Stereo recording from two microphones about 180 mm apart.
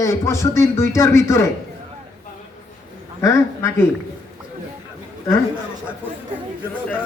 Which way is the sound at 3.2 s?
15° left (ahead or behind).